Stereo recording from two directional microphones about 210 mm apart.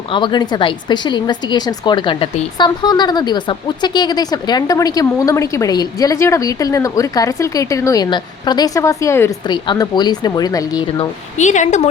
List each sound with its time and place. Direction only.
0.1 s a woman's voice: 20° left (ahead or behind)
11.3 s a woman's voice: 35° left (ahead or behind)